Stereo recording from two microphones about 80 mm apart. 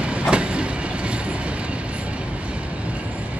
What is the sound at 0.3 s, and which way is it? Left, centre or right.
Train, centre.